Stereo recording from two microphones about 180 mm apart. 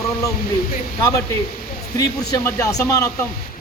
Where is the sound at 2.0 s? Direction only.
20° left (ahead or behind).